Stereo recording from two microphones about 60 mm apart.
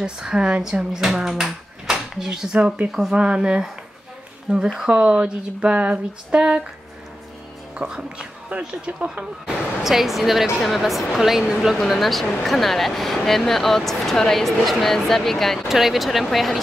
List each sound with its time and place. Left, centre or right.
0.0 s speech: centre
4.7 s a sound: centre
7.7 s speech: centre
9.8 s speech: centre